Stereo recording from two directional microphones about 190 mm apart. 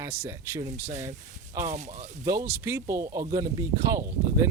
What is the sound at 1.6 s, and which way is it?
Speech, 35° right (ahead or behind).